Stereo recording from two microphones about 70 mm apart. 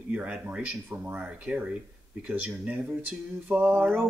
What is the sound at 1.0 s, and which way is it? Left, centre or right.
Speech, right.